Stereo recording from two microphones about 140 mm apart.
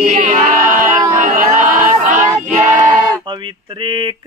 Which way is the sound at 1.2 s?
70° right (ahead or behind).